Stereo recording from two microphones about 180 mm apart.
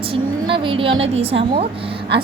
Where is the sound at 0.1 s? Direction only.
30° right (ahead or behind).